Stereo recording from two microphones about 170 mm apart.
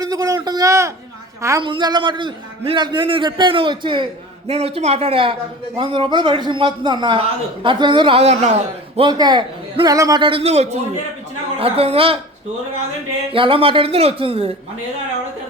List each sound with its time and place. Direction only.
0.0 s a sound: 20° right (ahead or behind)
1.4 s a woman's voice: 15° right (ahead or behind); by 9.0 s 40° right (ahead or behind)
9.0 s a man's voice: 25° right (ahead or behind)
13.3 s speech: 30° right (ahead or behind)